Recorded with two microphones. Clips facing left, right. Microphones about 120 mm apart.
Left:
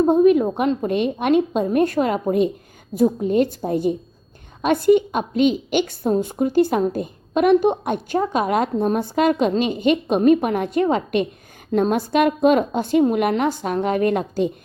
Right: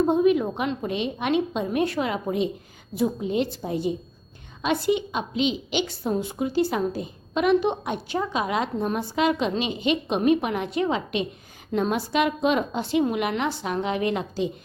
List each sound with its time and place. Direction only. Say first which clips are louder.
0.1 s a woman's voice: left 5 dB; 45° left (ahead or behind)